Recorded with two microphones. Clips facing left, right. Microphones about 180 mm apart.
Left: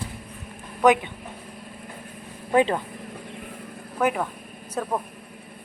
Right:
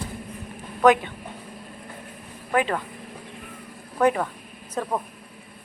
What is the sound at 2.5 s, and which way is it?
Speech, 25° left (ahead or behind).